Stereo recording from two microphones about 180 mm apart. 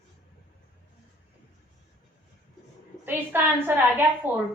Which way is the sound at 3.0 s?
10° right (ahead or behind).